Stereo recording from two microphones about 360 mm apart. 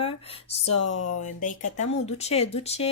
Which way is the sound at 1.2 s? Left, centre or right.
Left.